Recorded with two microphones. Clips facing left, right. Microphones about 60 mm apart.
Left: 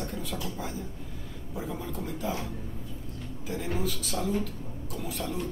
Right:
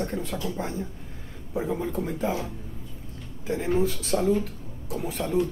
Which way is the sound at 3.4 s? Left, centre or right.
Right.